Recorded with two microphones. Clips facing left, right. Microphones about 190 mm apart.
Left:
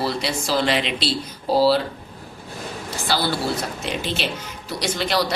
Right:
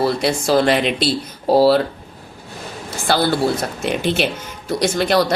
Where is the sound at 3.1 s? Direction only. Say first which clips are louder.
Right 6 dB; 50° right (ahead or behind).